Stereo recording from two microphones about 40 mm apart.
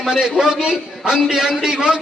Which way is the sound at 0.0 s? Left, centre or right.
Centre.